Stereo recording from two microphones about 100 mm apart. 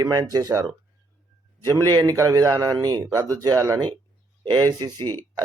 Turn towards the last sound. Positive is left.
turn(degrees=-50)  # may be behind; listen again after turning